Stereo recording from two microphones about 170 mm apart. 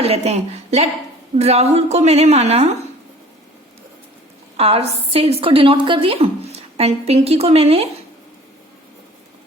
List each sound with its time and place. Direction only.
0.0 s a woman's voice: 40° right (ahead or behind)
4.5 s a woman's voice: 35° right (ahead or behind)